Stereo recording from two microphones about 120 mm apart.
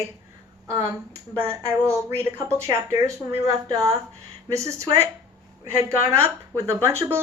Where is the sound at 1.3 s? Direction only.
25° right (ahead or behind).